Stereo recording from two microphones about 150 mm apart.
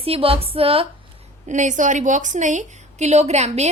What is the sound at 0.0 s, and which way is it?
Speech, 40° right (ahead or behind).